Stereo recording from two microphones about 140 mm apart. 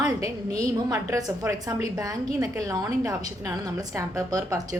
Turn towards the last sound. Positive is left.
turn(degrees=-20)  # may be behind; listen again after turning